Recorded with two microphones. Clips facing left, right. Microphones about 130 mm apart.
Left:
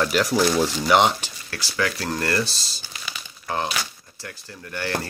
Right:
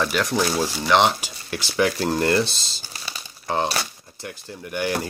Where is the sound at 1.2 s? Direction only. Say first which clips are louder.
Right 4 dB; 20° right (ahead or behind).